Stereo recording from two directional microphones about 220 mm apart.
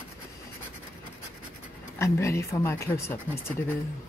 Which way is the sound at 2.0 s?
10° left (ahead or behind).